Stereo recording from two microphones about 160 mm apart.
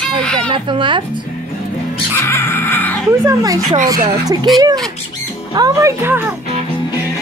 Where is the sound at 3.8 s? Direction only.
25° right (ahead or behind).